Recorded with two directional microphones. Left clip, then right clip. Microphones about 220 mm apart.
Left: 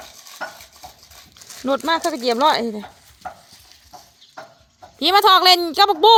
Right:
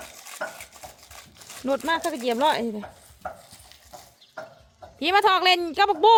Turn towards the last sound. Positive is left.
turn(degrees=20)  # may be behind; listen again after turning